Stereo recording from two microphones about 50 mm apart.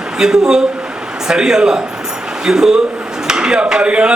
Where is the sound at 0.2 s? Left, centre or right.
Centre.